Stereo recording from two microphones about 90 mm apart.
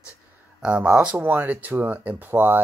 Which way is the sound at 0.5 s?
10° right (ahead or behind).